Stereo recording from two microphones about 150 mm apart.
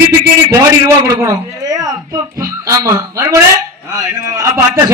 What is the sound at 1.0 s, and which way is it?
A man's voice, 20° right (ahead or behind).